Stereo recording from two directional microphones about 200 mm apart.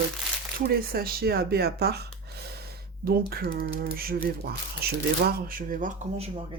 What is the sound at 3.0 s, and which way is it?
Speech, 50° right (ahead or behind).